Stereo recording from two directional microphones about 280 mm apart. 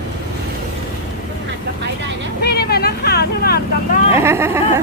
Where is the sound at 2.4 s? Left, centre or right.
Left.